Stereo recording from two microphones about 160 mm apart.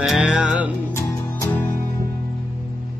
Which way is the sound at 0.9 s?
15° left (ahead or behind).